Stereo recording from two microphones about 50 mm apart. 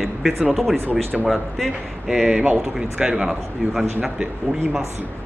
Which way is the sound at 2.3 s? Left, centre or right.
Right.